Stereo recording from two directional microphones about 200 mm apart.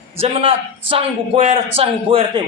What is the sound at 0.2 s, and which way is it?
A man's voice, 30° right (ahead or behind).